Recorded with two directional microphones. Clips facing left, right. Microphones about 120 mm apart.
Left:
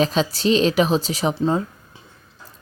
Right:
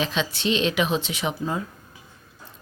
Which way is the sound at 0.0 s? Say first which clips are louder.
Left 6 dB; 40° left (ahead or behind).